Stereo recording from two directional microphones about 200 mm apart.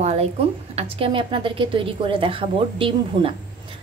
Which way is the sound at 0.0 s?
30° right (ahead or behind).